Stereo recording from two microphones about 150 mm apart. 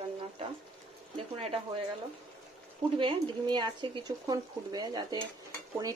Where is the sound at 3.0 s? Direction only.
30° right (ahead or behind).